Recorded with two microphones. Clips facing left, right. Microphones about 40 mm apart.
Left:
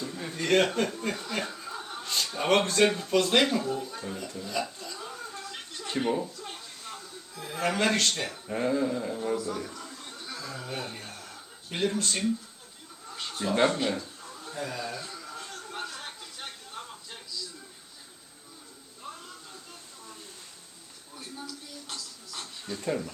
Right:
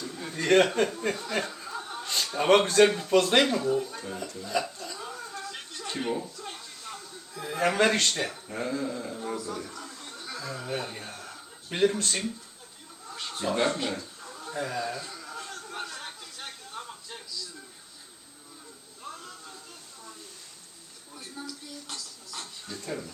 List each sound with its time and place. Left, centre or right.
0.1 s chuckle: centre
0.5 s speech: centre
4.9 s television: centre
6.0 s a man's voice: centre
8.4 s a man's voice: centre
13.1 s a sound: centre
13.6 s speech: centre
14.2 s a sound: centre
19.1 s a sound: centre
21.3 s music: centre
22.6 s speech: left